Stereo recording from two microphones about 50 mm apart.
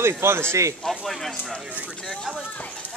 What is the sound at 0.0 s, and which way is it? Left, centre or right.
Speech, right.